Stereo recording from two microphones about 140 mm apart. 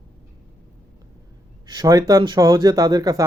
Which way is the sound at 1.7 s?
25° right (ahead or behind).